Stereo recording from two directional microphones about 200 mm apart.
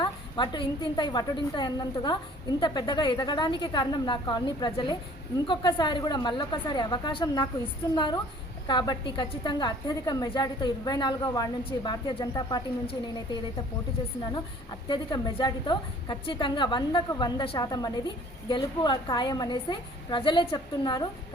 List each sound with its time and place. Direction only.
0.0 s a woman's voice: 25° left (ahead or behind)